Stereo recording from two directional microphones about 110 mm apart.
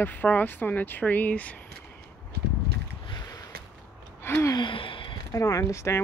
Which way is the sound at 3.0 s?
40° left (ahead or behind).